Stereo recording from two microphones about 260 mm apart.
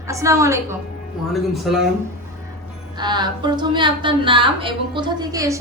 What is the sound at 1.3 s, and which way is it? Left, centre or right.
Speech, centre.